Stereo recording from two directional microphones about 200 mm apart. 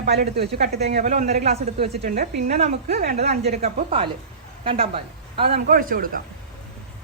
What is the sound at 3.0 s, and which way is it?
Speech, 55° right (ahead or behind).